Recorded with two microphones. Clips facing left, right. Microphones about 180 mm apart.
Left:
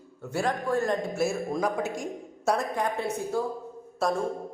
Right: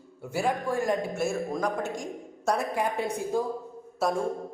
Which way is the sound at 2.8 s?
15° right (ahead or behind).